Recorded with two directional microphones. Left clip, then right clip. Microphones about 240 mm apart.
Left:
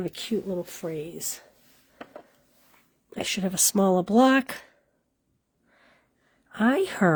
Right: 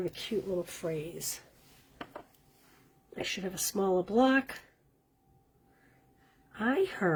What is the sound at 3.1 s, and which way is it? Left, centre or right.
Speech, left.